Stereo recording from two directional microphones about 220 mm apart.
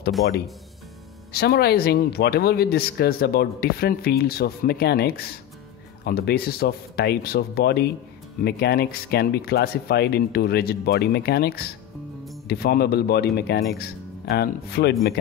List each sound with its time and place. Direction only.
1.3 s speech: 45° left (ahead or behind)